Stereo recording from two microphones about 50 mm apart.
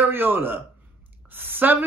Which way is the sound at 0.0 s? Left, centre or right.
Right.